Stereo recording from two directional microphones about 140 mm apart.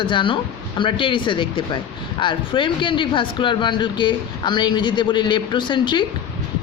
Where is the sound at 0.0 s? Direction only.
35° left (ahead or behind).